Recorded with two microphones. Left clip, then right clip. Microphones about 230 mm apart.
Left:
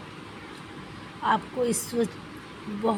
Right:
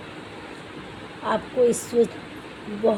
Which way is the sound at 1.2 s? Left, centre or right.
Left.